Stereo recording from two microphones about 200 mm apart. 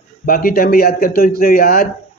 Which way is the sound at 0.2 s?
45° left (ahead or behind).